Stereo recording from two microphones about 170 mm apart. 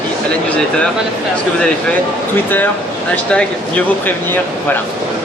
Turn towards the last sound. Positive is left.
turn(degrees=10)  # may be behind; listen again after turning